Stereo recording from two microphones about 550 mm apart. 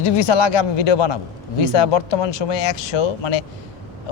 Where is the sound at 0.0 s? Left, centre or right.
Left.